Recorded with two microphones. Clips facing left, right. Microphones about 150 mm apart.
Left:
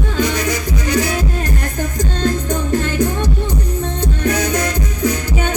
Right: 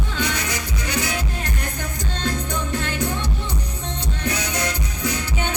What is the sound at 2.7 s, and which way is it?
Music, 45° left (ahead or behind).